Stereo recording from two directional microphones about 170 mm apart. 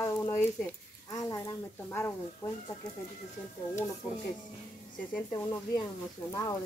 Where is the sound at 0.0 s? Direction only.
15° left (ahead or behind).